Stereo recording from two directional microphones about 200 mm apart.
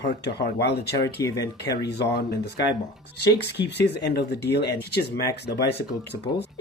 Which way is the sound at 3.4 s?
55° left (ahead or behind).